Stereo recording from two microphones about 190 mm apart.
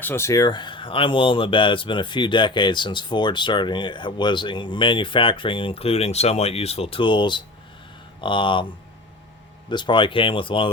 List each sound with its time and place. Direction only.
0.0 s speech: 15° left (ahead or behind)
9.6 s speech: 25° left (ahead or behind)